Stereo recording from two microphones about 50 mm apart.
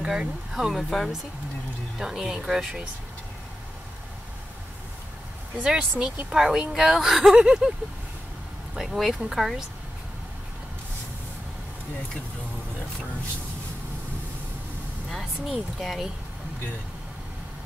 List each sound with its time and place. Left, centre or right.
0.0 s speech: centre
2.0 s speech: centre
5.6 s speech: centre
8.8 s speech: centre
15.8 s speech: centre